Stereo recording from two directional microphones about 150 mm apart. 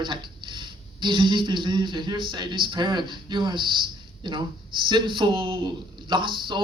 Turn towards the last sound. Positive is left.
turn(degrees=-30)  # may be behind; listen again after turning